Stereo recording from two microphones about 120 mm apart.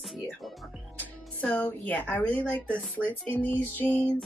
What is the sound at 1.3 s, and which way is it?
Music, 10° left (ahead or behind).